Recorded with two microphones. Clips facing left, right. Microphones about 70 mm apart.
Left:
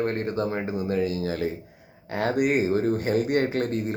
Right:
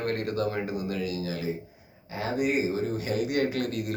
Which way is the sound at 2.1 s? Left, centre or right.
Left.